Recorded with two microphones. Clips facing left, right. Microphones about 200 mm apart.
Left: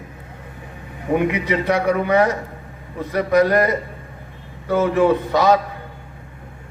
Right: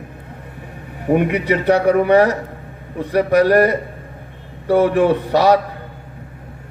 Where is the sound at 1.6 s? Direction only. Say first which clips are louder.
Right 6 dB; 35° right (ahead or behind).